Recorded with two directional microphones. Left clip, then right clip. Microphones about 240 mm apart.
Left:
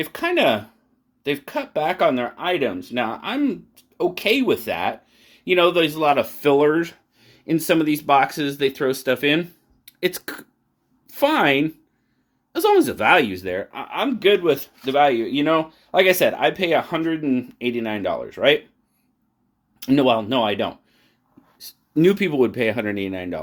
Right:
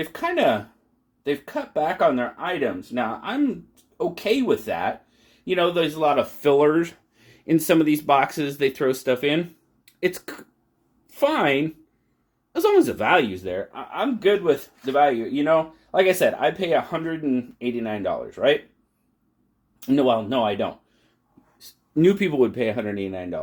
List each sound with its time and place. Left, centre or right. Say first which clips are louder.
0.0 s a woman's voice: left 2 dB; left
19.8 s speech: left 2 dB; left
21.6 s speech: left 2 dB; centre